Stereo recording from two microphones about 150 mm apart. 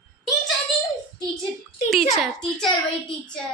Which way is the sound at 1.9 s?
Centre (ahead or behind).